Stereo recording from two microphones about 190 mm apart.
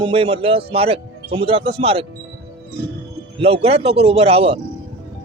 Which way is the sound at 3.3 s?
30° right (ahead or behind).